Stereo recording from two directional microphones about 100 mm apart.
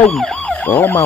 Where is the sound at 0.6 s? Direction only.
20° left (ahead or behind).